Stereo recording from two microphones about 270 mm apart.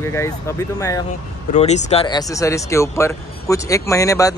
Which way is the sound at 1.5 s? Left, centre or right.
Left.